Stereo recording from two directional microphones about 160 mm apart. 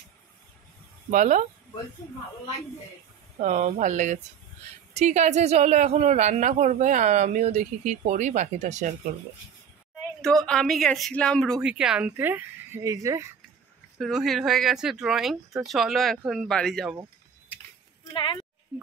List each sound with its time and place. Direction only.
1.1 s speech: 50° right (ahead or behind)
3.3 s speech: 50° right (ahead or behind)
10.2 s speech: 5° left (ahead or behind); by 13.3 s 20° right (ahead or behind)
13.9 s speech: centre (ahead or behind)
18.1 s a woman's voice: 35° left (ahead or behind)
18.7 s speech: 5° right (ahead or behind)